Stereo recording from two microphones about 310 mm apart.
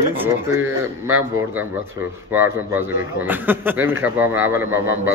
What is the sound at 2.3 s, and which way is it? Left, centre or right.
Speech, centre.